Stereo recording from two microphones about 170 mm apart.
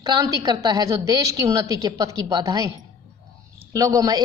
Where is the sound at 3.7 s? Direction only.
20° right (ahead or behind).